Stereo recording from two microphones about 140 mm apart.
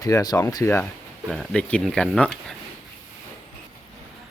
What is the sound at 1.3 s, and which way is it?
Speech, 5° left (ahead or behind).